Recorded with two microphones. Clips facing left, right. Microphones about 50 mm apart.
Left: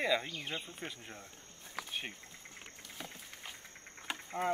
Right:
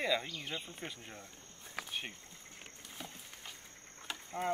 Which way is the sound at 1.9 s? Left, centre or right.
Centre.